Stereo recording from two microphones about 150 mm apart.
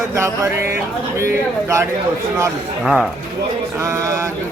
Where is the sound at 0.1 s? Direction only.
20° right (ahead or behind).